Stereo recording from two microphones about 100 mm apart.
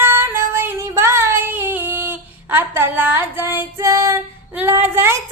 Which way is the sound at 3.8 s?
30° right (ahead or behind).